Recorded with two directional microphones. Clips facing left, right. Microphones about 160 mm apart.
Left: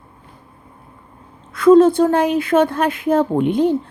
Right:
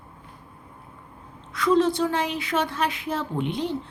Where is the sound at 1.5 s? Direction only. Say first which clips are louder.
Left 11 dB; 50° left (ahead or behind).